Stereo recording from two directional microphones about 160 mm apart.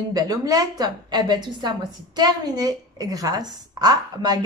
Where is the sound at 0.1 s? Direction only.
25° right (ahead or behind).